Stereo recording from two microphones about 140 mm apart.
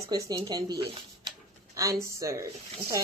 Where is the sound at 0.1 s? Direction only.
30° right (ahead or behind).